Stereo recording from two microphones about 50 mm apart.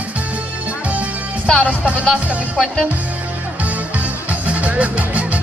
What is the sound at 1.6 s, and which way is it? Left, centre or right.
Speech, right.